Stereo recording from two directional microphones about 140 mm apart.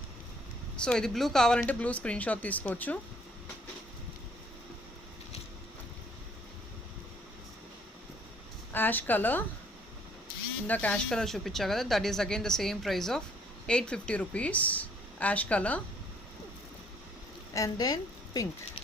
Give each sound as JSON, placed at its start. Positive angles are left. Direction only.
{"t": 0.8, "sound": "speech", "side_deg": 5}
{"t": 8.7, "sound": "speech", "side_deg": 15}
{"t": 10.7, "sound": "a woman's voice", "side_deg": 10}
{"t": 17.5, "sound": "a woman's voice", "side_deg": 25}